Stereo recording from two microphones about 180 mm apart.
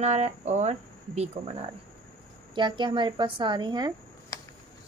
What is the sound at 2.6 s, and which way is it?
Speech, 25° right (ahead or behind).